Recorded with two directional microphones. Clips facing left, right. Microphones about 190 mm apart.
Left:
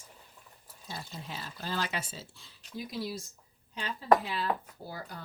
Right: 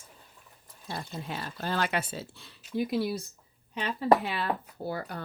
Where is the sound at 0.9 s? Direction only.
60° right (ahead or behind).